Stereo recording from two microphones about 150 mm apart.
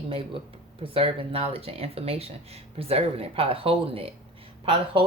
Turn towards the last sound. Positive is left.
turn(degrees=-35)  # may be behind; listen again after turning